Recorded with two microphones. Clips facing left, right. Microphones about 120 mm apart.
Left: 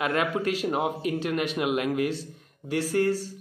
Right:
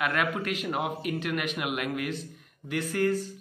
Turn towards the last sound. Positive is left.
turn(degrees=30)  # may be behind; listen again after turning